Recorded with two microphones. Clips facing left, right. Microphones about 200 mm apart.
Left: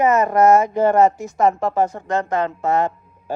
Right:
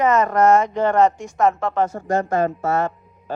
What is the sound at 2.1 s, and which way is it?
Speech, 20° left (ahead or behind).